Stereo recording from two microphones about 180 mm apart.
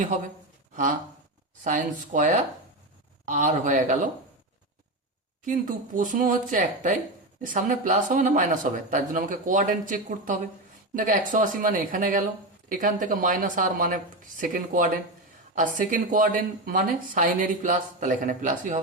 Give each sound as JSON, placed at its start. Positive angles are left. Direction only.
{"t": 1.6, "sound": "speech", "side_deg": -45}
{"t": 5.5, "sound": "speech", "side_deg": -50}